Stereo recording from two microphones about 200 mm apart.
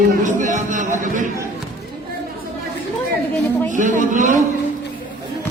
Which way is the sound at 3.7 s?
40° right (ahead or behind).